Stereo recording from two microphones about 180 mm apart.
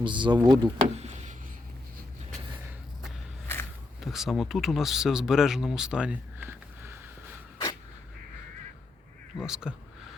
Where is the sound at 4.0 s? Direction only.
Centre (ahead or behind).